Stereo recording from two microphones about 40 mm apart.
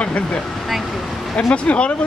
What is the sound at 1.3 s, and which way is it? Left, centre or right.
Speech, left.